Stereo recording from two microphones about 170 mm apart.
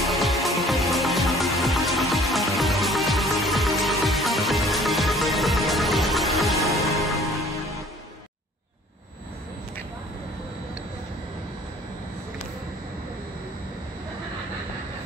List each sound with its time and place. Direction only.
0.0 s music: centre (ahead or behind)